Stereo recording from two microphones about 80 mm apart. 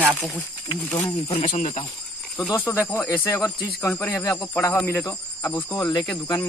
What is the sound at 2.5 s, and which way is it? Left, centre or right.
Speech, left.